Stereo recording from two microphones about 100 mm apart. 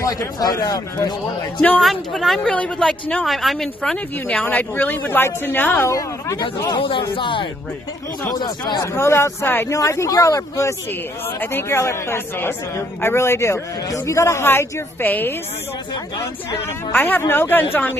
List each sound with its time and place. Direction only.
0.0 s speech: 35° left (ahead or behind)
1.8 s speech: centre (ahead or behind); by 5.7 s 20° left (ahead or behind)
5.8 s speech: 30° left (ahead or behind)
6.7 s speech: 60° left (ahead or behind)
8.3 s speech: 40° left (ahead or behind)
8.9 s a man's voice: 30° left (ahead or behind)
16.9 s a man's voice: 20° left (ahead or behind)